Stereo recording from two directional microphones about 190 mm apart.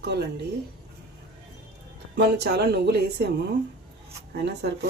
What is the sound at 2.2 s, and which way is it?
Speech, 60° right (ahead or behind).